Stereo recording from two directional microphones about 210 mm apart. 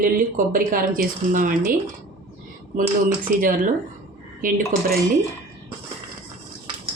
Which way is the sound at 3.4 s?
40° right (ahead or behind).